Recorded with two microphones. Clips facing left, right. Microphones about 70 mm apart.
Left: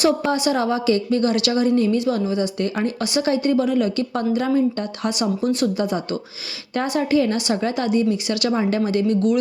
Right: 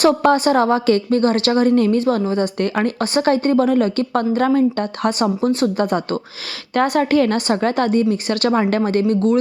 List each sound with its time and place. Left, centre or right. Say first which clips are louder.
0.0 s a woman's voice: right 5 dB; right